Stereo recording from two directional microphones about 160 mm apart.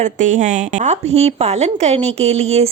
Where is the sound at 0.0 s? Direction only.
50° right (ahead or behind).